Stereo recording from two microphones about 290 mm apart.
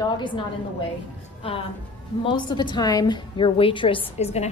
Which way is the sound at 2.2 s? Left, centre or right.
Centre.